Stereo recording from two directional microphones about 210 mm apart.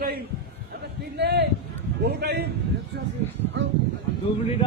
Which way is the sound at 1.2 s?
55° right (ahead or behind).